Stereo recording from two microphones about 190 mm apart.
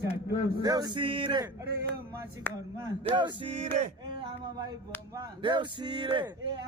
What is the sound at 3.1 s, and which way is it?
Speech, 25° right (ahead or behind).